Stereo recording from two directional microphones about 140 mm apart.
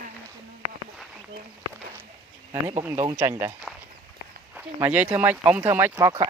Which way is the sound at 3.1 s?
20° right (ahead or behind).